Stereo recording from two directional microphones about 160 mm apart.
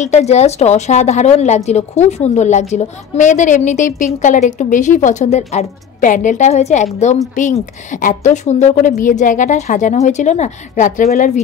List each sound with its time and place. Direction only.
0.0 s a woman's voice: 45° left (ahead or behind)